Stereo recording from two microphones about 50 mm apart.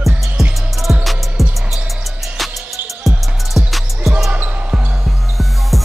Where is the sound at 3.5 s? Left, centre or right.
Centre.